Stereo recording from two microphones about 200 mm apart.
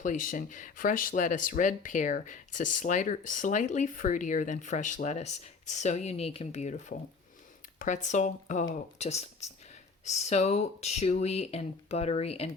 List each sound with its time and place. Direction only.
0.0 s speech: 40° left (ahead or behind)